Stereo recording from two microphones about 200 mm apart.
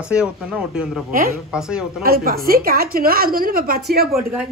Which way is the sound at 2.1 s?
50° right (ahead or behind).